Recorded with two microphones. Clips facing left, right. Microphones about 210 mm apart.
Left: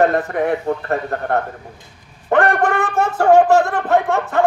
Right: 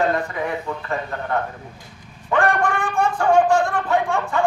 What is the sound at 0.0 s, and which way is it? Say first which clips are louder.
A man's voice: left 6 dB; 55° left (ahead or behind).